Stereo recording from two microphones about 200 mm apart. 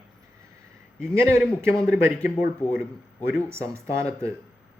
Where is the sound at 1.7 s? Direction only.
5° left (ahead or behind).